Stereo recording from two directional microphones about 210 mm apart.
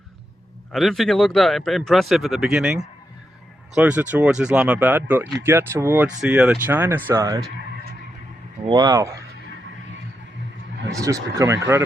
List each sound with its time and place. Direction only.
0.7 s speech: centre (ahead or behind); by 7.4 s 15° right (ahead or behind)
8.6 s speech: 20° right (ahead or behind)
10.9 s speech: 15° right (ahead or behind)